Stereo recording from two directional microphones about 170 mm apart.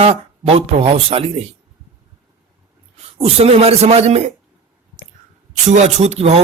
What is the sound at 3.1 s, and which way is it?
Speech, 35° right (ahead or behind).